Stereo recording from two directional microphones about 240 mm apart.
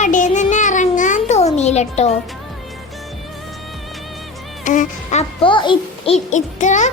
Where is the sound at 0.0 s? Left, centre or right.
Left.